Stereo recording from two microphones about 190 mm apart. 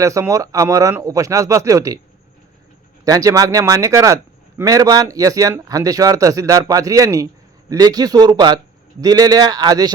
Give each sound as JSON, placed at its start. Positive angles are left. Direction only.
{"t": 0.0, "sound": "a man's voice", "side_deg": -15}
{"t": 3.0, "sound": "a man's voice", "side_deg": -15}